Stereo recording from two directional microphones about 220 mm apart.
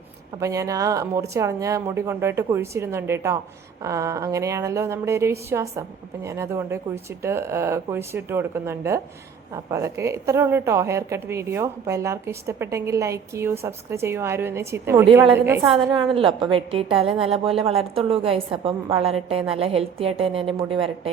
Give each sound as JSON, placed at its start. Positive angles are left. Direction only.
{"t": 0.3, "sound": "a woman's voice", "side_deg": -15}
{"t": 15.6, "sound": "a woman's voice", "side_deg": -20}